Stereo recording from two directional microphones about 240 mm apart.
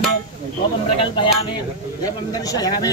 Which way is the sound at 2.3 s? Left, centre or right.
Centre.